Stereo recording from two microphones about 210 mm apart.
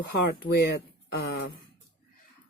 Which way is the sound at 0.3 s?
50° left (ahead or behind).